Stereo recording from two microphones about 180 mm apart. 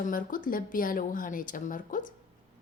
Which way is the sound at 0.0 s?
50° left (ahead or behind).